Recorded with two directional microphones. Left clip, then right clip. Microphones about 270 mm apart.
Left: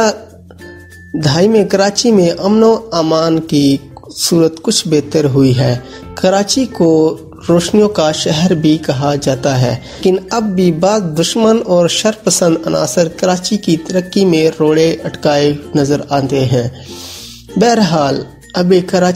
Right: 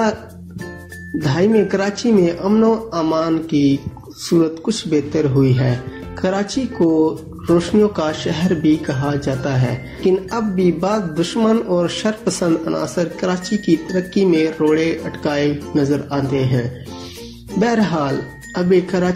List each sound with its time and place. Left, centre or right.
1.2 s speech: left